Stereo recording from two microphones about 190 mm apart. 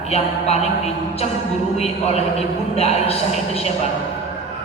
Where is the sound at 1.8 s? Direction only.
35° left (ahead or behind).